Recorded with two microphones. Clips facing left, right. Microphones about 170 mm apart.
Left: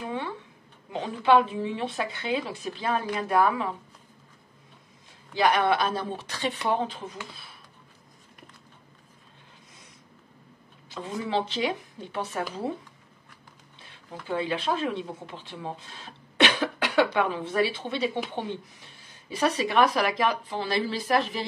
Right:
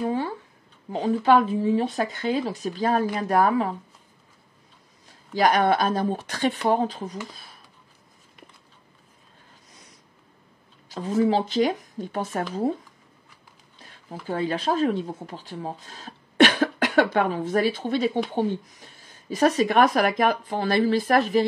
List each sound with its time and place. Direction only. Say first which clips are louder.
0.0 s a sound: right 7 dB; 40° right (ahead or behind)
0.9 s speech: right 3 dB; 40° right (ahead or behind)
5.3 s speech: right 3 dB; 40° right (ahead or behind)
10.9 s speech: right 9 dB; 40° right (ahead or behind)
14.2 s speech: right 3 dB; 40° right (ahead or behind)